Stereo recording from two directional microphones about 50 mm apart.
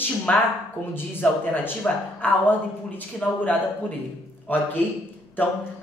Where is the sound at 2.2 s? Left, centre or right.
Left.